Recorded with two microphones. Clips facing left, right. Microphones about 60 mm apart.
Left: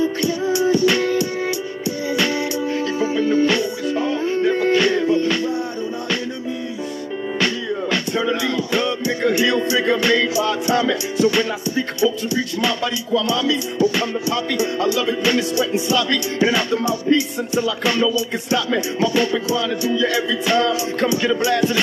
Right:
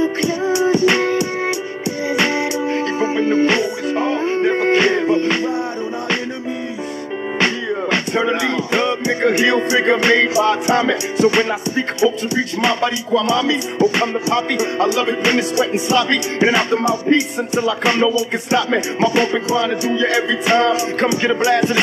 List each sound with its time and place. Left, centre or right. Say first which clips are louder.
0.0 s music: right 2 dB; right
7.3 s music: right 3 dB; right